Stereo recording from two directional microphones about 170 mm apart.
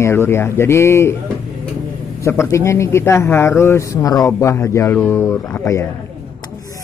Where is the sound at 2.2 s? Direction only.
15° left (ahead or behind).